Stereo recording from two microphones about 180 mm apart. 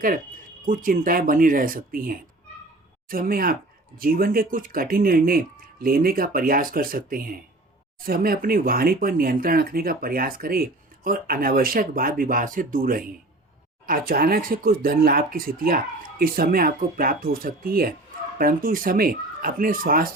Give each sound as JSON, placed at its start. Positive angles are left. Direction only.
{"t": 0.6, "sound": "speech", "side_deg": -50}